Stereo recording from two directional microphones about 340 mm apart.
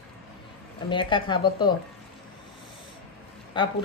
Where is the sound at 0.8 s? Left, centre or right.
Centre.